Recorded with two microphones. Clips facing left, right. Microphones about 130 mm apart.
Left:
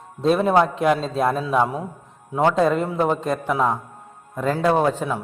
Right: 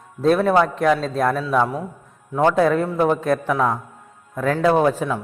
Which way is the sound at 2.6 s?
Centre (ahead or behind).